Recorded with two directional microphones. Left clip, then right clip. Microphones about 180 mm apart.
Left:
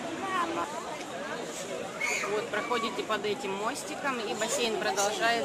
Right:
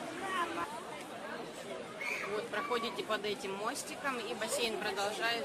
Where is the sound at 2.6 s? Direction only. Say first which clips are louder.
Left 5 dB; 10° right (ahead or behind).